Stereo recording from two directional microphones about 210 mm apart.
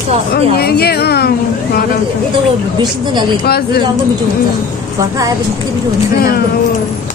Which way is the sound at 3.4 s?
50° left (ahead or behind).